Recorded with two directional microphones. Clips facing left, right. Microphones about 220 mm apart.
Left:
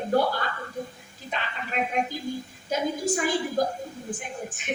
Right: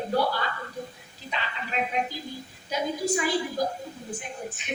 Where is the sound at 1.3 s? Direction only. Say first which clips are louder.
Left 1 dB; 50° left (ahead or behind).